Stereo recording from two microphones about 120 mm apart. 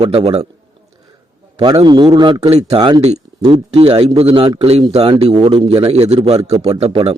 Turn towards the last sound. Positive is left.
turn(degrees=-50)  # may be behind; listen again after turning